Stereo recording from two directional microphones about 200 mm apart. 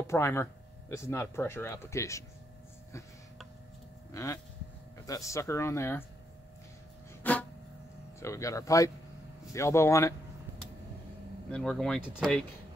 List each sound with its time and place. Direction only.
0.0 s speech: 15° left (ahead or behind)
4.1 s speech: 15° left (ahead or behind)
7.2 s a sound: 10° left (ahead or behind)
8.2 s speech: 15° left (ahead or behind)
11.5 s speech: 5° left (ahead or behind)